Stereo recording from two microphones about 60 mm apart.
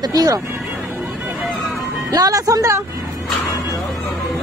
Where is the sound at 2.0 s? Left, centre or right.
Right.